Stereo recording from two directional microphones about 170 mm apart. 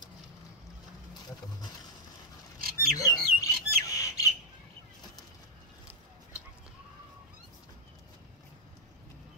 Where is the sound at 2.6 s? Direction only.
60° right (ahead or behind).